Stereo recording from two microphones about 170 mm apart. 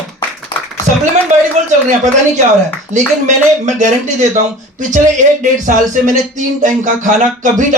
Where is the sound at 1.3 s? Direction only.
45° right (ahead or behind).